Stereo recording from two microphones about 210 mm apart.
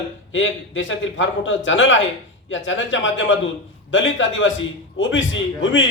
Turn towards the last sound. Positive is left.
turn(degrees=65)  # may be behind; listen again after turning